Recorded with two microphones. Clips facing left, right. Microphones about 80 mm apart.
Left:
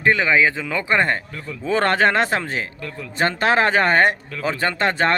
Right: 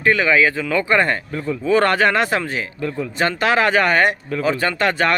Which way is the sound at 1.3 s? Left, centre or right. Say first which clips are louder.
Right 9 dB; right.